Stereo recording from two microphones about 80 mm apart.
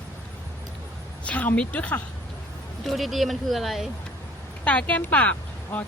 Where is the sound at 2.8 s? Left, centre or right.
Centre.